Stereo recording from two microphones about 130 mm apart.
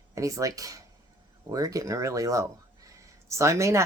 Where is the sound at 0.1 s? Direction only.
25° right (ahead or behind).